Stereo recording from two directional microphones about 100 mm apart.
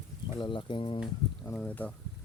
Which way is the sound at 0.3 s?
50° left (ahead or behind).